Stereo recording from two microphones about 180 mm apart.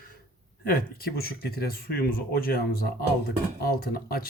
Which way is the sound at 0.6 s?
55° left (ahead or behind).